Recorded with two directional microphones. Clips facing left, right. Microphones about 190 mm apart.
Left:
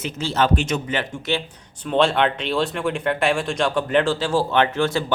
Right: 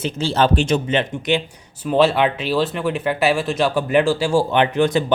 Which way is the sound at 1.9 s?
5° right (ahead or behind).